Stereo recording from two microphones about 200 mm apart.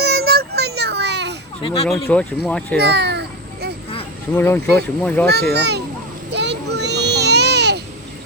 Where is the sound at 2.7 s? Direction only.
55° right (ahead or behind).